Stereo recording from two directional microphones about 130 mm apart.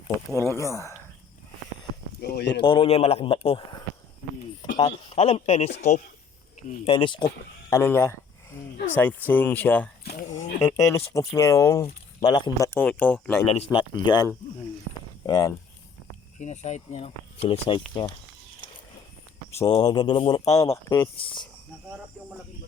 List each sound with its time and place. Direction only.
0.3 s speech: 20° left (ahead or behind)
2.6 s speech: 40° left (ahead or behind)
4.9 s speech: 50° left (ahead or behind)
6.8 s speech: 40° left (ahead or behind)
7.7 s speech: 20° left (ahead or behind)
12.8 s speech: 10° left (ahead or behind)
13.7 s speech: 35° left (ahead or behind)
15.3 s speech: 30° left (ahead or behind)
16.4 s speech: 60° left (ahead or behind); by 17.8 s 45° left (ahead or behind)
19.5 s speech: 30° left (ahead or behind)
21.2 s speech: 40° left (ahead or behind)